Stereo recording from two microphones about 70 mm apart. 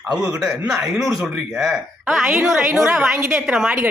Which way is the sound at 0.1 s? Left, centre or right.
Centre.